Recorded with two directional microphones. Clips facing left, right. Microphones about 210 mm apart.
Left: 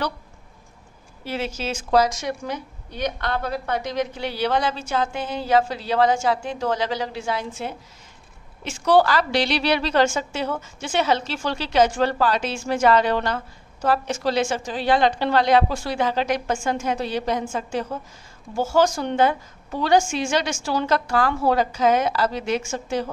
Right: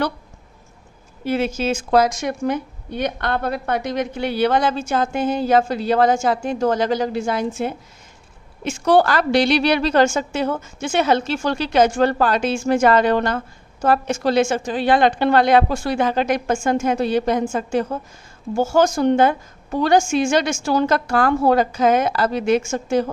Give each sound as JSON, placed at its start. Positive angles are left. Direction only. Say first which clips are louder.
{"t": 1.2, "sound": "a woman's voice", "louder": "right 7 dB", "side_deg": -50}